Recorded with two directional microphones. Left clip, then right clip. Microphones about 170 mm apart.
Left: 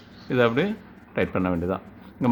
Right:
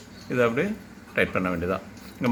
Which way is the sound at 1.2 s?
65° left (ahead or behind).